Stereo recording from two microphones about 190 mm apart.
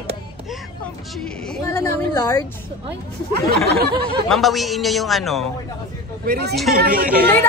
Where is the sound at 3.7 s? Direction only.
60° right (ahead or behind).